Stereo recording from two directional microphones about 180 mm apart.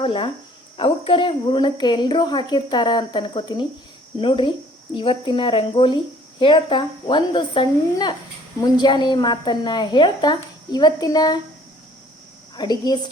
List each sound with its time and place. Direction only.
0.0 s a woman's voice: 30° left (ahead or behind)
12.5 s a woman's voice: 25° left (ahead or behind)